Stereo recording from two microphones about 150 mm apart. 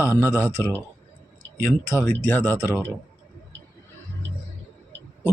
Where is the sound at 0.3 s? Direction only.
15° left (ahead or behind).